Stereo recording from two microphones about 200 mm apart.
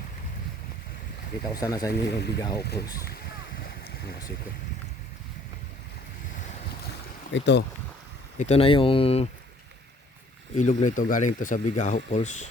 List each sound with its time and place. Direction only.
1.5 s speech: 15° left (ahead or behind)
1.9 s speech: 55° left (ahead or behind)
2.4 s speech: 20° left (ahead or behind)
7.3 s speech: 60° left (ahead or behind)
8.4 s speech: 30° left (ahead or behind)
10.5 s speech: 35° left (ahead or behind)